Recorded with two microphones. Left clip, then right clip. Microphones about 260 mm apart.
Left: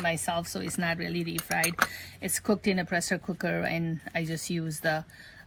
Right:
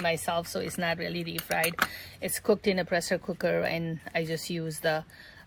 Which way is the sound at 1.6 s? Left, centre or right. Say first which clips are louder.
Left 1 dB; centre.